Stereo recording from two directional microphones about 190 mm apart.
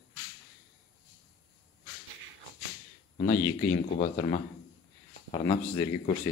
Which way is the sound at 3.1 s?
35° left (ahead or behind).